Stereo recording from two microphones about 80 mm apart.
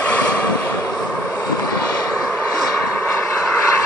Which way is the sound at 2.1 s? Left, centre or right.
Left.